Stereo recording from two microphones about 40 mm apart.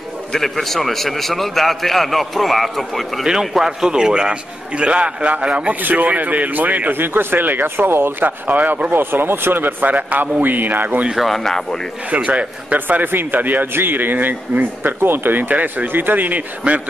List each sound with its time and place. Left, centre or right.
0.4 s a man's voice: centre
3.3 s a man's voice: centre; by 5.3 s right
5.7 s a man's voice: right
7.0 s speech: right
8.2 s speech: right
8.9 s speech: right
11.1 s a man's voice: centre
12.1 s speech: right
13.0 s a man's voice: right
15.0 s speech: right
15.5 s speech: right
15.9 s a man's voice: right